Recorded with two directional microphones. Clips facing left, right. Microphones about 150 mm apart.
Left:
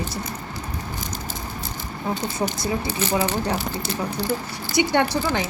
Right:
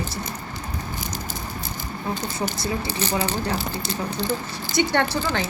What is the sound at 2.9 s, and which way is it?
A woman's voice, 35° right (ahead or behind).